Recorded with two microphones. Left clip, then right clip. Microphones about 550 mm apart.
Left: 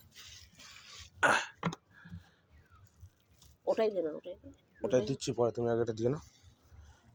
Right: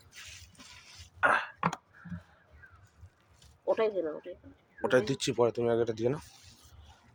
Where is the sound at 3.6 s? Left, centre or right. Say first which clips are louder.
Right 2 dB; left.